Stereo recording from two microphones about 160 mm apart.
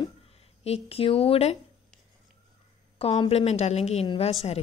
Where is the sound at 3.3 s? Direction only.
40° left (ahead or behind).